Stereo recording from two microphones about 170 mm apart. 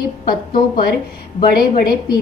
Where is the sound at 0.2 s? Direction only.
55° left (ahead or behind).